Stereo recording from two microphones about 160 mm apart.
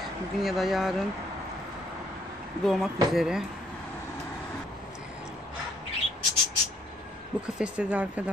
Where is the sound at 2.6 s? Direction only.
Centre (ahead or behind).